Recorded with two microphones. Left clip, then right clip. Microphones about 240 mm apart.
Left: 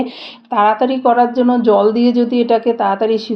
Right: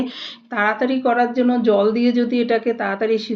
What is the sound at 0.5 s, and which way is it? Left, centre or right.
Speech, left.